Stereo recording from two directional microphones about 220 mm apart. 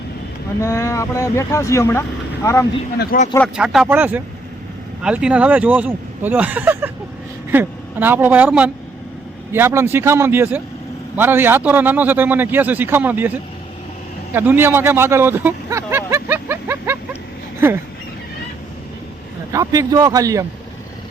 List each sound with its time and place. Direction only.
0.6 s speech: 10° left (ahead or behind)
3.0 s speech: 40° left (ahead or behind)
3.5 s speech: 5° right (ahead or behind)
19.5 s speech: 15° right (ahead or behind)